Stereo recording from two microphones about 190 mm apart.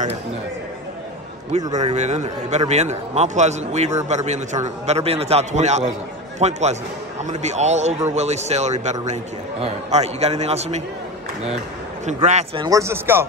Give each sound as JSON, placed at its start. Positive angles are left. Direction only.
{"t": 1.7, "sound": "a man's voice", "side_deg": -35}
{"t": 12.1, "sound": "a man's voice", "side_deg": -35}
{"t": 12.6, "sound": "speech", "side_deg": -15}